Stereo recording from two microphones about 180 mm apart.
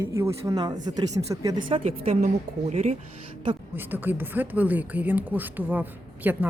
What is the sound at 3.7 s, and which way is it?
Speech, 10° right (ahead or behind).